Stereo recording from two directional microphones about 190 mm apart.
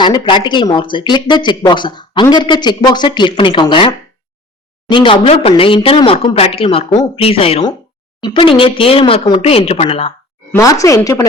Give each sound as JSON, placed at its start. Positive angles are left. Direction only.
{"t": 0.0, "sound": "a woman's voice", "side_deg": 25}
{"t": 10.5, "sound": "speech", "side_deg": 15}